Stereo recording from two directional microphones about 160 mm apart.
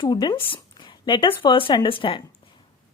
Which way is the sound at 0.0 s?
25° left (ahead or behind).